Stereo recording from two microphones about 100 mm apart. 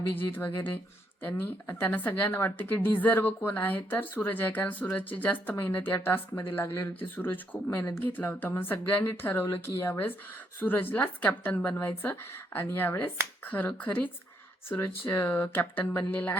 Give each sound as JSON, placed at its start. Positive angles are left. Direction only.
{"t": 0.3, "sound": "a woman's voice", "side_deg": 20}